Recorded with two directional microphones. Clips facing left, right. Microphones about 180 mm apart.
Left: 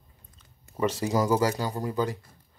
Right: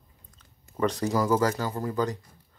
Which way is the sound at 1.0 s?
15° left (ahead or behind).